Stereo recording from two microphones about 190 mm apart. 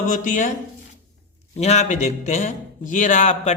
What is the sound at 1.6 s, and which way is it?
Speech, 35° left (ahead or behind).